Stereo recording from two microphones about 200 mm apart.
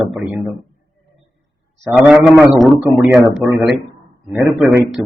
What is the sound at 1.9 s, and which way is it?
Speech, 5° right (ahead or behind).